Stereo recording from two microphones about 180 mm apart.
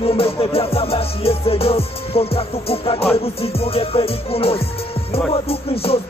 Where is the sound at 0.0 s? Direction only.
30° left (ahead or behind).